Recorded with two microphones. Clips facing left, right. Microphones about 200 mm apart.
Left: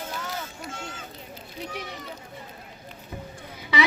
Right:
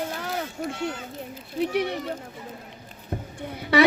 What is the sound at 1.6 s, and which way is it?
Speech, 65° right (ahead or behind).